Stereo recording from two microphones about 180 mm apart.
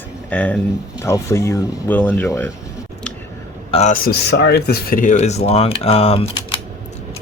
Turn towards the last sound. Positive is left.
turn(degrees=30)  # may be behind; listen again after turning